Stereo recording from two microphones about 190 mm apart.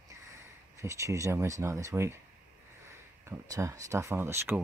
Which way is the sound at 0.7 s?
15° right (ahead or behind).